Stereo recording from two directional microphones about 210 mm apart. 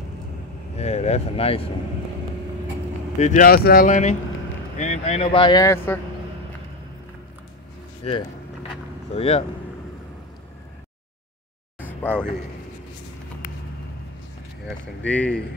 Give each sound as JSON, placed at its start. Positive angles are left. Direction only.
{"t": 0.7, "sound": "speech", "side_deg": 30}
{"t": 3.2, "sound": "speech", "side_deg": 35}
{"t": 8.0, "sound": "speech", "side_deg": 30}
{"t": 12.0, "sound": "speech", "side_deg": 5}
{"t": 15.0, "sound": "speech", "side_deg": 5}